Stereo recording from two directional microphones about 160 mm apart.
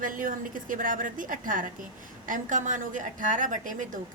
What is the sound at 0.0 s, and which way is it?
A woman's voice, 55° right (ahead or behind).